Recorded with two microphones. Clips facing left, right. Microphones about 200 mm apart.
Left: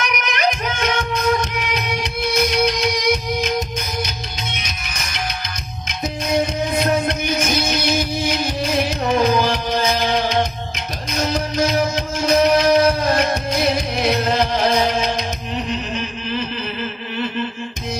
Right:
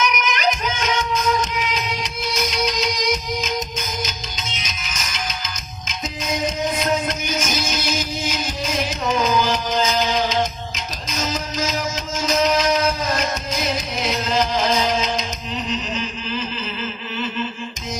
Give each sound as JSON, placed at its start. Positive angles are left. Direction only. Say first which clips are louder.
{"t": 0.0, "sound": "music", "louder": "even", "side_deg": 60}
{"t": 6.7, "sound": "music", "louder": "left 3 dB", "side_deg": 60}